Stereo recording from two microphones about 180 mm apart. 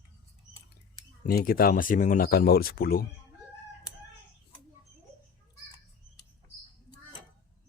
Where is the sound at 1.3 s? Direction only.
55° left (ahead or behind).